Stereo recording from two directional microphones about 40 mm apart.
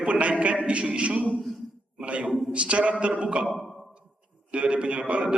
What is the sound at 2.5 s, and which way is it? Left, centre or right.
Speech, right.